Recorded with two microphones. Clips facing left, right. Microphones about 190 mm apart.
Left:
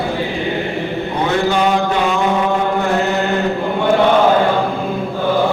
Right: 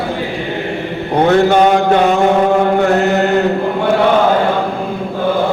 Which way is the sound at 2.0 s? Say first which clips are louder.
Right 5 dB; 45° right (ahead or behind).